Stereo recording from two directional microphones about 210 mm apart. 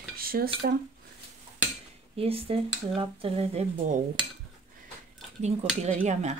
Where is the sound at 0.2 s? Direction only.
45° right (ahead or behind).